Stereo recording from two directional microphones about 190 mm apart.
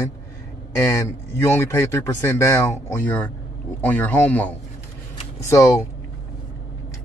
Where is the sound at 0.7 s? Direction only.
15° left (ahead or behind).